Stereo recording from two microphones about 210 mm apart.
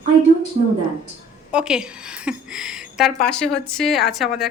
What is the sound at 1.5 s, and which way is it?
A woman's voice, 5° right (ahead or behind).